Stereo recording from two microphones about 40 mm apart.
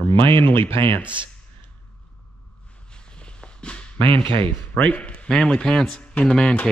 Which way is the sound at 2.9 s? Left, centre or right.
Left.